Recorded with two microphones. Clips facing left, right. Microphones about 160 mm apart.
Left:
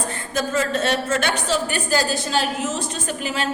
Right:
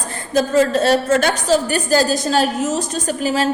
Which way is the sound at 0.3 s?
35° right (ahead or behind).